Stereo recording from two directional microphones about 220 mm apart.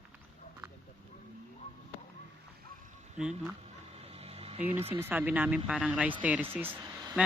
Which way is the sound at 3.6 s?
25° right (ahead or behind).